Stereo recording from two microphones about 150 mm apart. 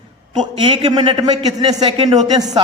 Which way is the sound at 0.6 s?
30° right (ahead or behind).